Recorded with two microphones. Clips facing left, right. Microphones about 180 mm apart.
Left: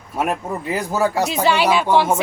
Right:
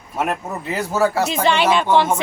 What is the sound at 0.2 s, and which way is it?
Speech, 10° left (ahead or behind).